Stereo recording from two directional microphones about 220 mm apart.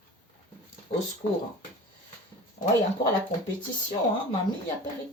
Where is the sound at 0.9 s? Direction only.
30° left (ahead or behind).